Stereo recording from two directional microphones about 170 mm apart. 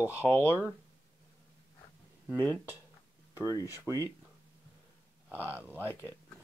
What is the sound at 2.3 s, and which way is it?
Speech, 15° left (ahead or behind).